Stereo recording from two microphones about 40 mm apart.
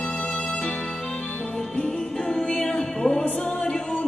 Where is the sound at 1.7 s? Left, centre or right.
Left.